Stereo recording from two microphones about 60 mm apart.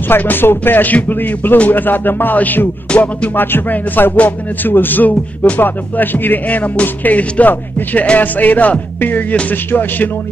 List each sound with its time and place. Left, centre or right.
0.2 s music: left